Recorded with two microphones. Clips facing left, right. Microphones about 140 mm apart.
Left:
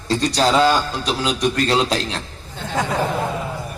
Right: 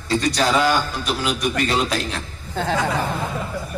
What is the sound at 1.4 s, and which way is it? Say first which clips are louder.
Speech: left 3 dB; 10° right (ahead or behind).